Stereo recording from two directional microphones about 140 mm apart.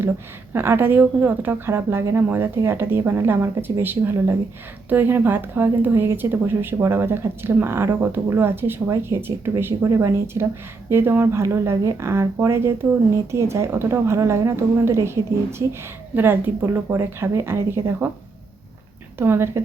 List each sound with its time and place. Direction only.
0.5 s a woman's voice: 15° right (ahead or behind)
19.2 s speech: 15° right (ahead or behind)